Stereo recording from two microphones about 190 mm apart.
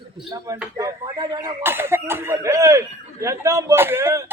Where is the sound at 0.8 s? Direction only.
20° right (ahead or behind).